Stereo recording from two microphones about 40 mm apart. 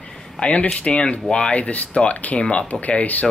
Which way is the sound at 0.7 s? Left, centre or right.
Left.